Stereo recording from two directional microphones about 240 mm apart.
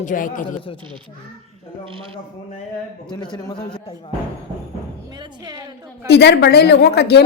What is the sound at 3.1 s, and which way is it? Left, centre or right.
Speech, centre.